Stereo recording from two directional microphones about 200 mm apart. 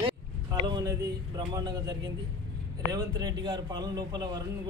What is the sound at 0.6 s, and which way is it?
A man's voice, 20° right (ahead or behind).